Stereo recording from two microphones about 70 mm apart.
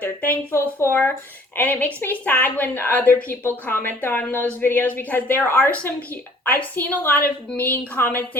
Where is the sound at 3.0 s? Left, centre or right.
Centre.